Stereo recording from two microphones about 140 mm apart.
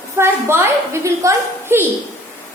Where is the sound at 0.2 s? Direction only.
15° right (ahead or behind).